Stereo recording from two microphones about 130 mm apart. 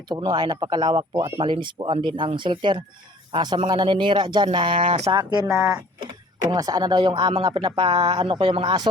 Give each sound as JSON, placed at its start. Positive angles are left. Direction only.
{"t": 0.1, "sound": "a man's voice", "side_deg": -35}